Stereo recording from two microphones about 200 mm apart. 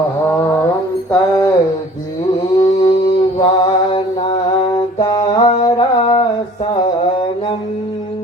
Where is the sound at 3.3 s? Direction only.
25° left (ahead or behind).